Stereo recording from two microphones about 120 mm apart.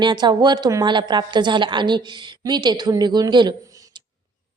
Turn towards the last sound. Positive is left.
turn(degrees=-40)  # may be behind; listen again after turning